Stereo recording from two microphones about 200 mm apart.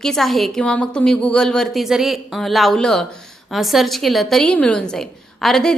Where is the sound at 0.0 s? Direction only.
Centre (ahead or behind).